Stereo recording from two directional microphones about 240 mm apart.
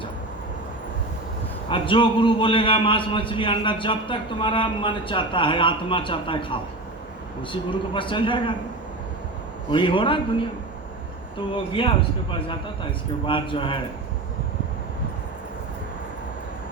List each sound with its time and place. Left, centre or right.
1.7 s a man's voice: left
9.6 s a man's voice: left